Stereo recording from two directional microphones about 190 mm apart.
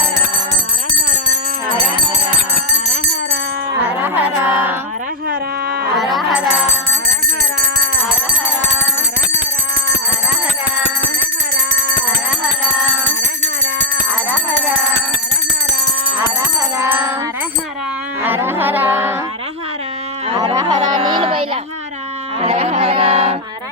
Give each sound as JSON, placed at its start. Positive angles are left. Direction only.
{"t": 4.0, "sound": "music", "side_deg": -10}
{"t": 6.1, "sound": "music", "side_deg": 0}
{"t": 16.7, "sound": "music", "side_deg": -10}
{"t": 18.2, "sound": "music", "side_deg": -10}
{"t": 20.3, "sound": "a sound", "side_deg": -20}
{"t": 22.4, "sound": "music", "side_deg": -35}